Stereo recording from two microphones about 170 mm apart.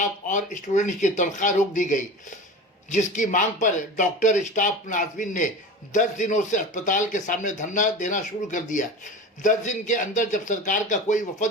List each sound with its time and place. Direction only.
0.3 s speech: 50° left (ahead or behind)
3.2 s speech: 45° left (ahead or behind)